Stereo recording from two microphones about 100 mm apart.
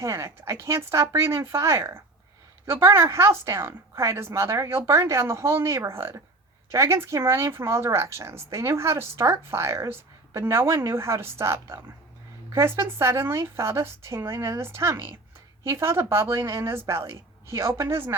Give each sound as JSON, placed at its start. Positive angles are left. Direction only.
{"t": 0.0, "sound": "speech", "side_deg": -30}